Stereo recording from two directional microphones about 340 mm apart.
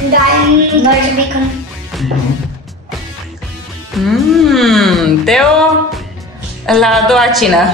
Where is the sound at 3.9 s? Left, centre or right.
Centre.